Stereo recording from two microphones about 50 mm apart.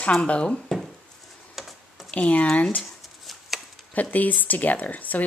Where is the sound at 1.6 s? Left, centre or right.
Centre.